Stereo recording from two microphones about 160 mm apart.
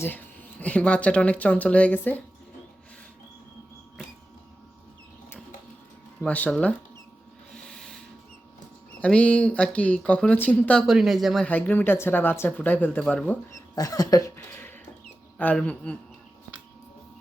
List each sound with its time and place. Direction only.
0.6 s speech: 10° left (ahead or behind)
6.2 s speech: 10° left (ahead or behind)
7.5 s a sound: 5° left (ahead or behind)
9.0 s speech: 5° left (ahead or behind)
11.4 s speech: 10° left (ahead or behind)
13.7 s cough: 20° left (ahead or behind)
15.4 s speech: 10° left (ahead or behind)